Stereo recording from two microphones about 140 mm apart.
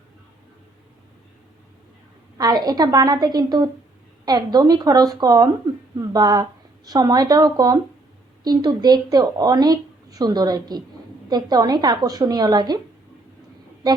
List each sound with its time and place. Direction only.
2.4 s a woman's voice: 25° right (ahead or behind)